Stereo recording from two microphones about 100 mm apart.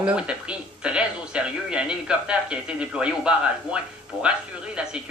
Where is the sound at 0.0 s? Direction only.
10° right (ahead or behind).